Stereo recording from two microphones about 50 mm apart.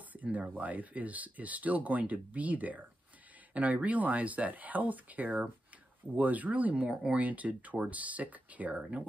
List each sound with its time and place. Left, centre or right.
0.1 s speech: right
7.2 s speech: right